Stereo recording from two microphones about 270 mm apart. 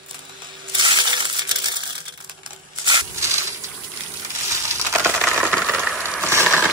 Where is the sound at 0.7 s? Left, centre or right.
Centre.